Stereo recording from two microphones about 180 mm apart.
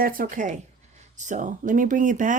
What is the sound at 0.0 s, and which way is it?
Speech, 50° right (ahead or behind).